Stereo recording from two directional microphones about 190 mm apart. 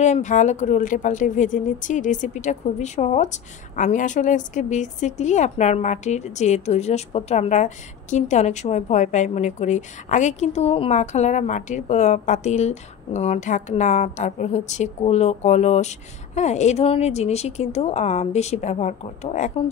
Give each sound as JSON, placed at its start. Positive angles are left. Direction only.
{"t": 0.0, "sound": "speech", "side_deg": 40}